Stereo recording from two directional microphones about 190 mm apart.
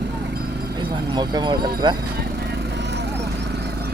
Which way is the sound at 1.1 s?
25° right (ahead or behind).